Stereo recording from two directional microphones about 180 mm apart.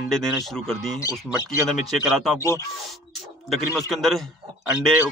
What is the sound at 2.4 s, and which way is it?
Speech, 15° left (ahead or behind).